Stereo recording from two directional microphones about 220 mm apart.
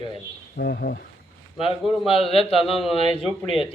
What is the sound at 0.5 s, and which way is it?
Speech, 50° left (ahead or behind).